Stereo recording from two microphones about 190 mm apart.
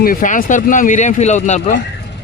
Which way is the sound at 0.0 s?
45° left (ahead or behind).